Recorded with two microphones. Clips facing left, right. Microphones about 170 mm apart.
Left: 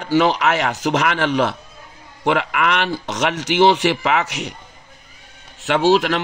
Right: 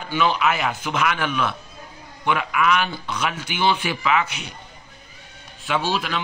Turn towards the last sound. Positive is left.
turn(degrees=80)